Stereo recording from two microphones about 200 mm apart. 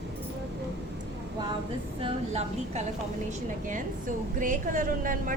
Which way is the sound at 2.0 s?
30° right (ahead or behind).